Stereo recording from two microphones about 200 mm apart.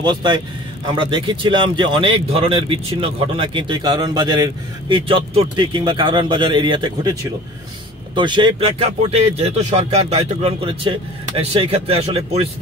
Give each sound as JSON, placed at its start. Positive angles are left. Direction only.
{"t": 0.0, "sound": "speech", "side_deg": -20}